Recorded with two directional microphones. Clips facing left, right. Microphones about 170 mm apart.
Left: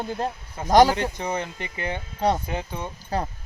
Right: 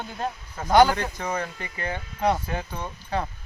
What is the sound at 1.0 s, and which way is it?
Speech, 20° left (ahead or behind).